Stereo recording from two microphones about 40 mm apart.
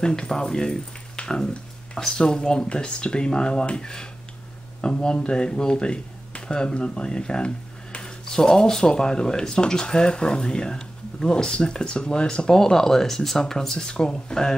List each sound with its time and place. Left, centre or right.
0.0 s speech: centre
1.1 s a sound: centre
2.0 s speech: centre